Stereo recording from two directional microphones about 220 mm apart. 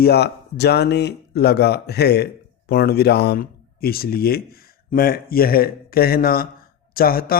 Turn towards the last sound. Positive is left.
turn(degrees=40)  # may be behind; listen again after turning